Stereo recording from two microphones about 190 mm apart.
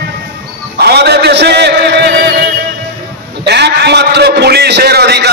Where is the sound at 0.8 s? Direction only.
60° right (ahead or behind).